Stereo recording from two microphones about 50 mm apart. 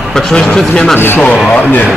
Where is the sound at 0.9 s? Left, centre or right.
Left.